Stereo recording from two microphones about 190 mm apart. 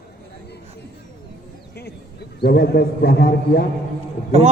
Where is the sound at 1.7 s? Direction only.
60° left (ahead or behind).